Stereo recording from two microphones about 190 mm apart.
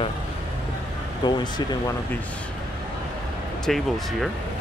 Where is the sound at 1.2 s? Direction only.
25° left (ahead or behind).